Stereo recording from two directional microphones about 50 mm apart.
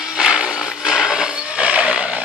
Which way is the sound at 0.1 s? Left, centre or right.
Centre.